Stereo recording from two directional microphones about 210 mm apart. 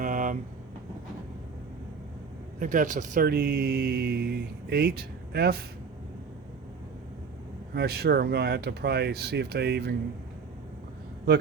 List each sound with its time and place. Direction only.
0.0 s vehicle: 40° right (ahead or behind)
2.6 s speech: 35° right (ahead or behind)
7.7 s speech: 50° right (ahead or behind)